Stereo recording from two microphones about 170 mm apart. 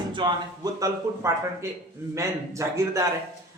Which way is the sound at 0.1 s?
25° right (ahead or behind).